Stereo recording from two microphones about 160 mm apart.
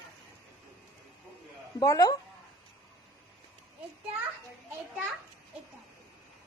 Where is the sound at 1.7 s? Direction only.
20° left (ahead or behind).